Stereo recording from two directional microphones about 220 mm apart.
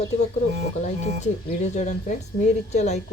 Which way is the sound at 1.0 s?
30° left (ahead or behind).